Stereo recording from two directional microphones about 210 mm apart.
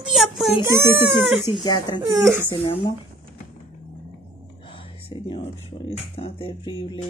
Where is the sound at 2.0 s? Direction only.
10° right (ahead or behind).